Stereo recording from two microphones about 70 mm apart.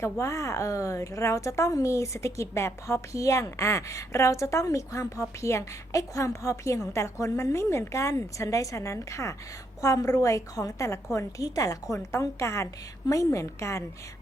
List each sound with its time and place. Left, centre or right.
0.0 s a woman's voice: left
12.2 s a woman's voice: left